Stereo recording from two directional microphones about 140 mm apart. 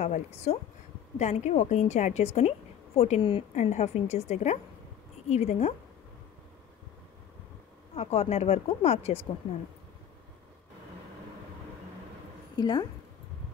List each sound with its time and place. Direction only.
0.0 s a woman's voice: 50° left (ahead or behind)
3.5 s speech: 55° left (ahead or behind)
7.9 s speech: 45° left (ahead or behind)
12.5 s a woman's voice: 30° left (ahead or behind)